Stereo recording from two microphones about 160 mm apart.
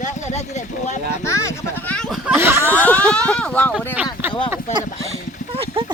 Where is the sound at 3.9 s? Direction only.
10° right (ahead or behind).